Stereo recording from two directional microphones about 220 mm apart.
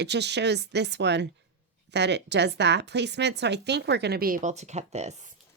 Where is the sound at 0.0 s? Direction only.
50° right (ahead or behind); by 5.3 s 30° right (ahead or behind).